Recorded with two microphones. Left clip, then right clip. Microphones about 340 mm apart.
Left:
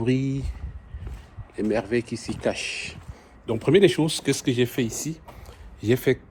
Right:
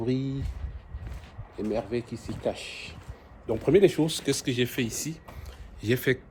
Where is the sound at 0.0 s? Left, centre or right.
Left.